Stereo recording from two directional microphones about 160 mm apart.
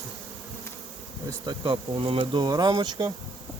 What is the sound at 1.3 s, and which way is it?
Bee, 30° right (ahead or behind).